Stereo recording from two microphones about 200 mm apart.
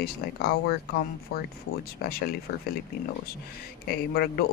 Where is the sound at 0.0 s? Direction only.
55° left (ahead or behind).